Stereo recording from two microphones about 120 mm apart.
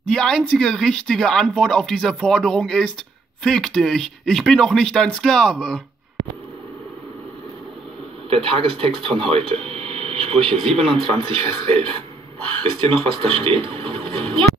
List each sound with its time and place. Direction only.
0.0 s speech: 5° left (ahead or behind)
8.3 s speech: 50° right (ahead or behind)